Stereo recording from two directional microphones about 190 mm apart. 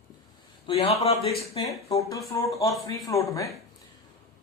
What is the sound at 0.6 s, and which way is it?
Speech, 30° left (ahead or behind).